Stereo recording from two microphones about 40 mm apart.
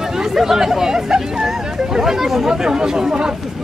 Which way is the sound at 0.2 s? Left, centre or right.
Centre.